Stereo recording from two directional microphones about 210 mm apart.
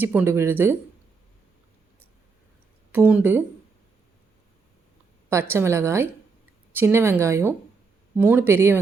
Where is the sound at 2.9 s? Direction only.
5° right (ahead or behind).